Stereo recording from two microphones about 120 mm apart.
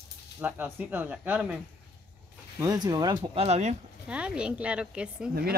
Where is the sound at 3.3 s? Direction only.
65° right (ahead or behind).